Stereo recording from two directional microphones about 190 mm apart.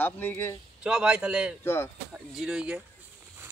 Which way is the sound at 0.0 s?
10° left (ahead or behind).